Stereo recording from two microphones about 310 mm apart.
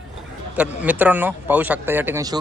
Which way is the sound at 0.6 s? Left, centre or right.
Centre.